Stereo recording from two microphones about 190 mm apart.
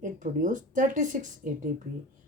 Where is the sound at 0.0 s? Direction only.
45° right (ahead or behind).